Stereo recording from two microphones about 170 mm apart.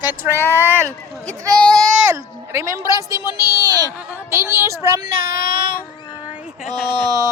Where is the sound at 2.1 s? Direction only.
15° right (ahead or behind).